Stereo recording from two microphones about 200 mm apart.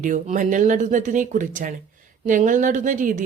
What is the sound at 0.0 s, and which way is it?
A woman's voice, 40° right (ahead or behind).